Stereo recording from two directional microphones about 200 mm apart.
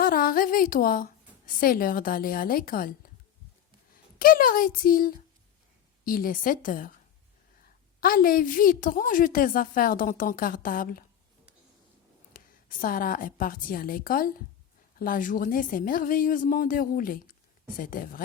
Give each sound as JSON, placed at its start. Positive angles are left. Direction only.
{"t": 0.0, "sound": "a woman's voice", "side_deg": 45}
{"t": 4.2, "sound": "a woman's voice", "side_deg": 45}
{"t": 8.0, "sound": "a woman's voice", "side_deg": 45}
{"t": 12.3, "sound": "a woman's voice", "side_deg": 45}